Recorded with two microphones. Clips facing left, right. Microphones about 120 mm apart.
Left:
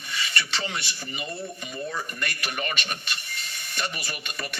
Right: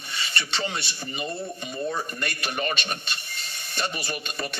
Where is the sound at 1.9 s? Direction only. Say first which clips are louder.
Right 2 dB; 30° right (ahead or behind).